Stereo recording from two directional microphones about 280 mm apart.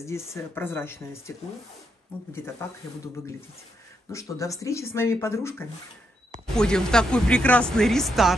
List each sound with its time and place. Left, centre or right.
0.0 s speech: centre
2.6 s speech: centre
4.1 s speech: centre